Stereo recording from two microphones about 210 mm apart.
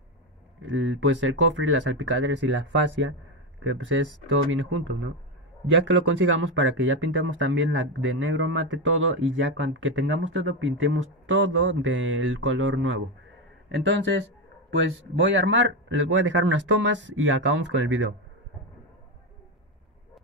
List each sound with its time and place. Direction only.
0.6 s speech: 65° right (ahead or behind)
13.8 s speech: 55° right (ahead or behind)